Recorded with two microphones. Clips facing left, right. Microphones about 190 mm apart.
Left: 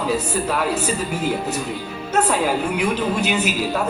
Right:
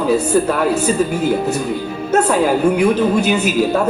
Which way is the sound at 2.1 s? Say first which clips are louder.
Right 5 dB; 50° right (ahead or behind).